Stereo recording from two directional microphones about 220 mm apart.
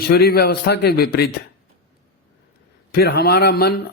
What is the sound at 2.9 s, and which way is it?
Speech, 45° left (ahead or behind).